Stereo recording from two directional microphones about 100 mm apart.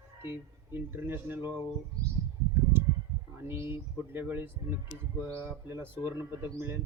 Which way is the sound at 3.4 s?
25° right (ahead or behind).